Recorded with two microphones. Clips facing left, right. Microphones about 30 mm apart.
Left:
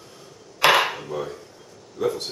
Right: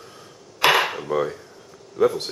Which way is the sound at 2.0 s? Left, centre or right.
Centre.